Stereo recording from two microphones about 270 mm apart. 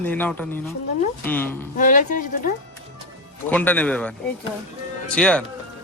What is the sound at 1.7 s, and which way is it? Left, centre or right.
Speech, left.